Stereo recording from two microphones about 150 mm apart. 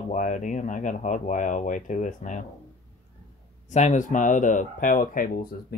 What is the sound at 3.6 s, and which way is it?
Speech, 50° left (ahead or behind).